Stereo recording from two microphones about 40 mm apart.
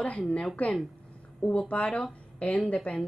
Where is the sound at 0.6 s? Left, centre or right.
Left.